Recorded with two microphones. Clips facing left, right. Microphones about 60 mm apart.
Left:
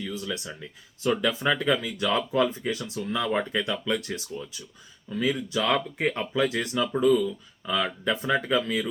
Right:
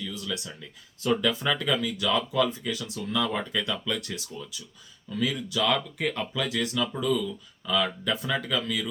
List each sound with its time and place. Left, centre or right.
0.0 s speech: left